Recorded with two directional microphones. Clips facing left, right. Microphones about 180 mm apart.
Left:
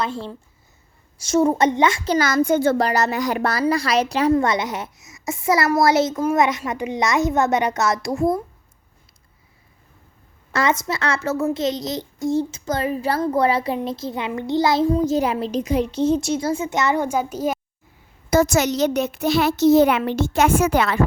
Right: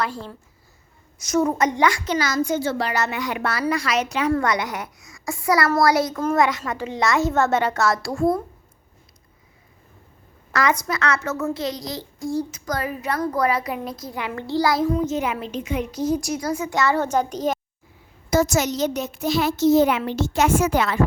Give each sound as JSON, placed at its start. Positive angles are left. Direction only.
{"t": 0.0, "sound": "child singing", "side_deg": 25}
{"t": 2.1, "sound": "a child's voice", "side_deg": 55}
{"t": 4.3, "sound": "child singing", "side_deg": 25}
{"t": 10.5, "sound": "child singing", "side_deg": 25}
{"t": 18.3, "sound": "a woman's voice", "side_deg": 60}